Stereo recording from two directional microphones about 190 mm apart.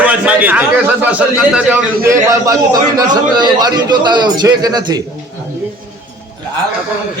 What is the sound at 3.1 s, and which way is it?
A man's voice, 20° right (ahead or behind).